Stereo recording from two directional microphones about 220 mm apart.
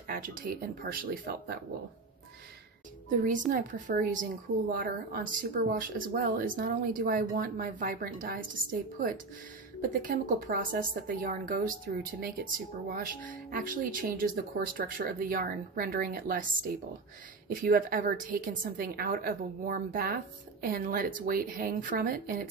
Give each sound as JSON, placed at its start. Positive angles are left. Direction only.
{"t": 0.0, "sound": "speech", "side_deg": -40}
{"t": 3.1, "sound": "speech", "side_deg": -35}